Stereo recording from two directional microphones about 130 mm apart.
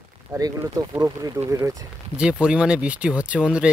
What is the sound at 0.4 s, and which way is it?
Speech, 25° right (ahead or behind).